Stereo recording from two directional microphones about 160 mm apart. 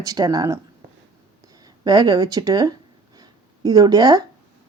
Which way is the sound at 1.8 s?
25° right (ahead or behind).